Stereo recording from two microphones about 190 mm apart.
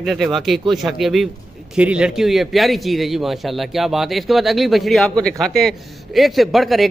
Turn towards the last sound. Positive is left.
turn(degrees=0)  # may be behind; listen again after turning